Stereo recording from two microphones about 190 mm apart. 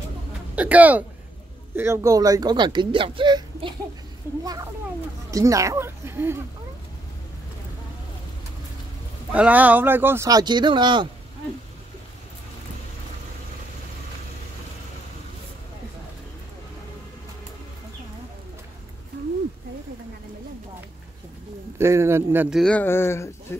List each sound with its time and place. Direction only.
0.6 s speech: 10° right (ahead or behind); by 3.7 s 25° right (ahead or behind)
5.3 s speech: 15° right (ahead or behind)
9.3 s speech: 5° right (ahead or behind); by 11.1 s 25° right (ahead or behind)
21.7 s speech: 15° right (ahead or behind)
22.6 s speech: 5° left (ahead or behind)